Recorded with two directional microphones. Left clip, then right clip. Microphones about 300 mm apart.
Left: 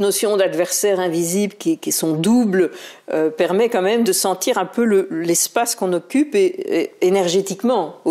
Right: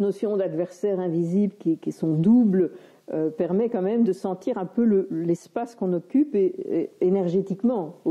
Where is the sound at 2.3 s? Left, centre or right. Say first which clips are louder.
Left 3 dB; centre.